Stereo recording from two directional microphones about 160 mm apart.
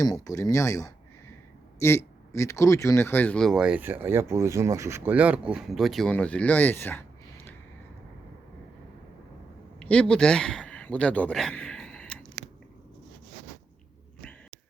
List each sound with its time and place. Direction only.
0.0 s speech: 20° left (ahead or behind)
9.8 s speech: 5° left (ahead or behind)